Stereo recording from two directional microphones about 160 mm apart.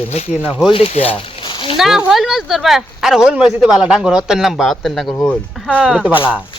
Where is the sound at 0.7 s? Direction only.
40° left (ahead or behind).